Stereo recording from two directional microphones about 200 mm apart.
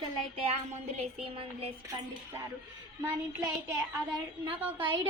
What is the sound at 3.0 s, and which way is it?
Child singing, 15° right (ahead or behind).